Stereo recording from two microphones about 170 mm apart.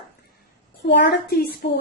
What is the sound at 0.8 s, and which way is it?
Speech, 80° left.